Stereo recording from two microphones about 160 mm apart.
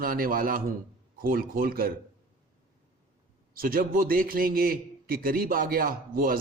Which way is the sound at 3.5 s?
65° right (ahead or behind).